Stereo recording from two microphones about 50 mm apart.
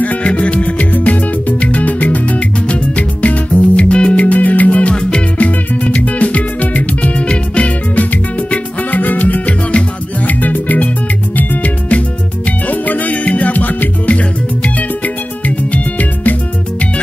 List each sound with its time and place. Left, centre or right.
0.0 s music: left